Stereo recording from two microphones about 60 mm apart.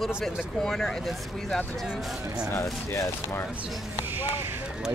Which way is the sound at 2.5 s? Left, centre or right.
Left.